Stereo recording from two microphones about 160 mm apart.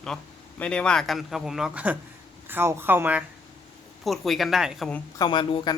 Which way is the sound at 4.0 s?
Centre (ahead or behind).